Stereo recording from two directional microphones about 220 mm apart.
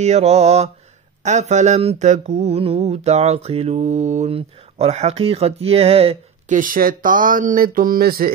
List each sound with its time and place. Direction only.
0.0 s mantra: 30° right (ahead or behind)